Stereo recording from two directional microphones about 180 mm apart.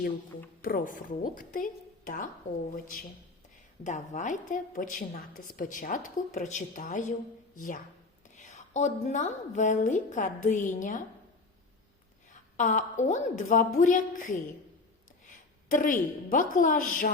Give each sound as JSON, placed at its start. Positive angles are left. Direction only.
{"t": 0.6, "sound": "a woman's voice", "side_deg": 50}
{"t": 3.8, "sound": "a woman's voice", "side_deg": 40}
{"t": 12.3, "sound": "a woman's voice", "side_deg": 40}